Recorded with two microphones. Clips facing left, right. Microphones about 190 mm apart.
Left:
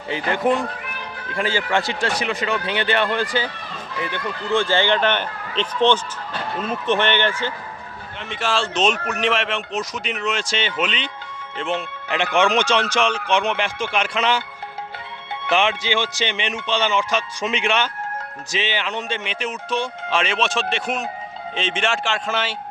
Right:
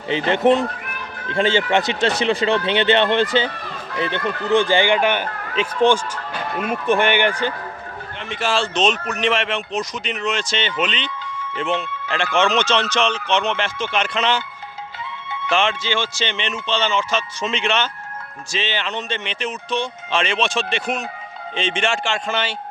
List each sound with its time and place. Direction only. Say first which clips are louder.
0.1 s speech: right 4 dB; 25° right (ahead or behind)
8.3 s speech: right 2 dB; centre (ahead or behind)
11.8 s speech: even; 15° left (ahead or behind)
15.4 s speech: even; 15° left (ahead or behind)